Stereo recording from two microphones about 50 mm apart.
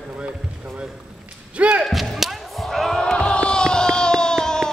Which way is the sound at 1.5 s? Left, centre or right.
Right.